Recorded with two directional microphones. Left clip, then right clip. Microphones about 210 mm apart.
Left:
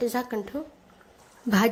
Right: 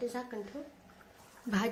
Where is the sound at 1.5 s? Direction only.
45° left (ahead or behind).